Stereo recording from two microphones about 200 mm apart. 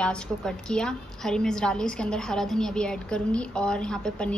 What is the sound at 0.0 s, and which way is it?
A woman's voice, 5° left (ahead or behind).